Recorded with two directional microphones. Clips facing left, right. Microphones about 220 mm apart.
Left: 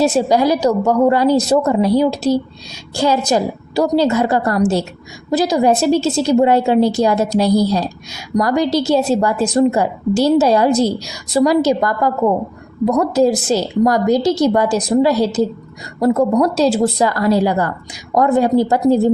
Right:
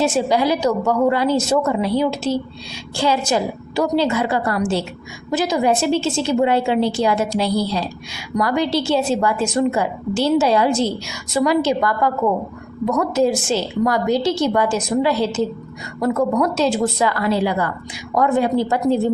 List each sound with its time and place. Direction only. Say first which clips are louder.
0.0 s a woman's voice: left 4 dB; 40° left (ahead or behind)